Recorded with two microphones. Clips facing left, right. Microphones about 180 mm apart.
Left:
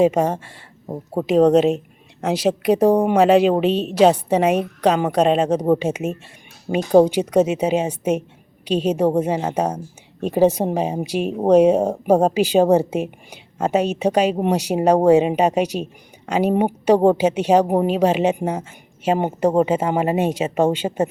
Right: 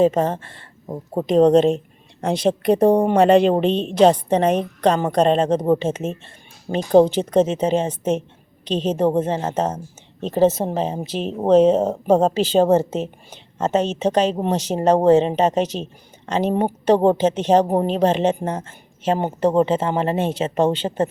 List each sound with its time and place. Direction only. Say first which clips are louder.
0.0 s speech: even; 10° left (ahead or behind)